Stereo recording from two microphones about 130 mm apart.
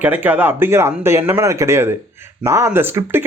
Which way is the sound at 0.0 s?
15° right (ahead or behind).